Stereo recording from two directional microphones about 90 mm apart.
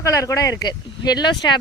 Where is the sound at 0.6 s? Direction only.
50° left (ahead or behind).